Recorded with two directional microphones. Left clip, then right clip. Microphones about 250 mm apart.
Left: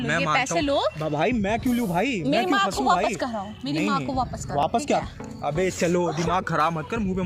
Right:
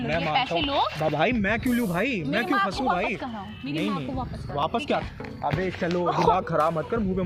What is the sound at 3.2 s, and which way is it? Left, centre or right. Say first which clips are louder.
Speech: left 5 dB; left.